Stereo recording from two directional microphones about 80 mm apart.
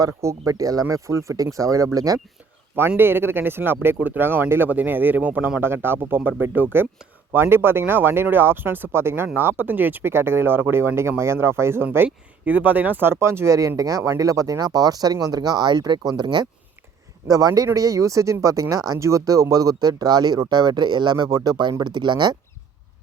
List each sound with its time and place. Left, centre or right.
0.0 s speech: right
3.0 s speech: right
17.2 s speech: right